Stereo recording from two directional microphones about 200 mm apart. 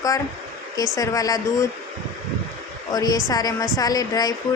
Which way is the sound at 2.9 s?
20° left (ahead or behind).